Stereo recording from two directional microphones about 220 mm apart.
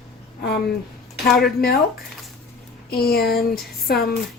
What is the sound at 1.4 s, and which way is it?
Speech, 45° left (ahead or behind).